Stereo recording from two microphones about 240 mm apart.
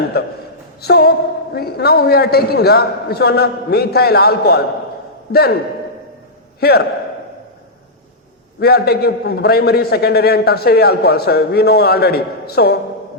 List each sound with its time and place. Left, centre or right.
0.1 s a sound: left
1.5 s a man's voice: left
6.6 s a man's voice: left
8.5 s a man's voice: left